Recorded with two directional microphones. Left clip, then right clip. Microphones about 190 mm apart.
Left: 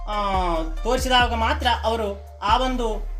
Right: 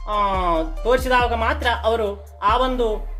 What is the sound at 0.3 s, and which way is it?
Speech, 15° right (ahead or behind).